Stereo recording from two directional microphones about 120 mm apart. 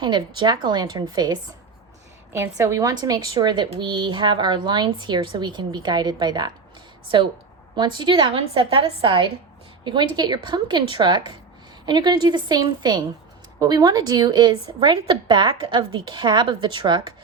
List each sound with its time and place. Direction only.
0.0 s a woman's voice: 40° right (ahead or behind)
2.3 s a woman's voice: 25° right (ahead or behind)
7.8 s a woman's voice: 40° right (ahead or behind)